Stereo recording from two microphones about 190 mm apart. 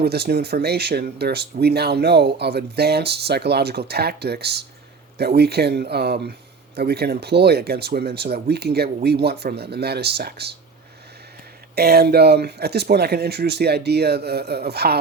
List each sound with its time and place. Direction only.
0.0 s speech: 55° right (ahead or behind)
11.7 s speech: 55° right (ahead or behind)